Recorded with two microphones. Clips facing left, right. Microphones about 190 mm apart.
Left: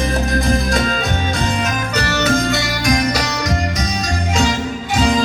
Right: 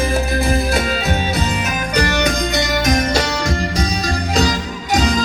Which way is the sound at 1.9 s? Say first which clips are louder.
Even; 15° right (ahead or behind).